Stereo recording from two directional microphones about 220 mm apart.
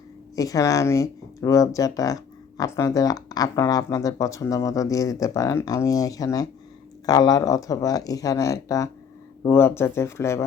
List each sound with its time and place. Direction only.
0.3 s speech: 15° left (ahead or behind)